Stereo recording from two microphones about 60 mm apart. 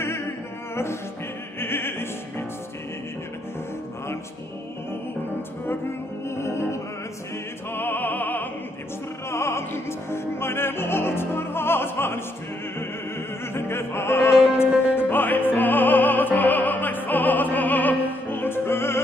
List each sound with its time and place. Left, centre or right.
1.6 s music: left
6.2 s music: left
7.7 s music: left
9.3 s opera: left
13.5 s music: left